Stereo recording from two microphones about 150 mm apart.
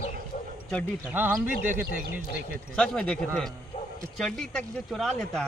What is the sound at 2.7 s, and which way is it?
Speech, 5° left (ahead or behind).